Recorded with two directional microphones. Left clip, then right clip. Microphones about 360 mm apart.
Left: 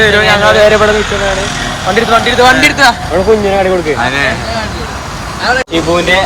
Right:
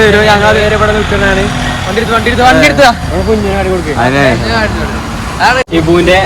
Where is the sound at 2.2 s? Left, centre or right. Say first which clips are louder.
Right 3 dB; centre.